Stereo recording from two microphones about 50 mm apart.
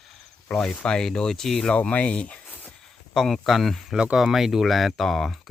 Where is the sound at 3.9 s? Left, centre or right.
Centre.